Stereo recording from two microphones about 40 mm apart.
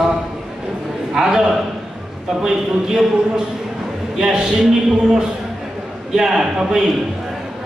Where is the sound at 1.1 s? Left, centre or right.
Centre.